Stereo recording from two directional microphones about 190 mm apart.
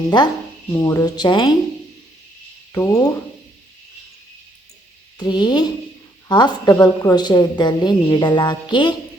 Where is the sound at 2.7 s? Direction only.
20° left (ahead or behind).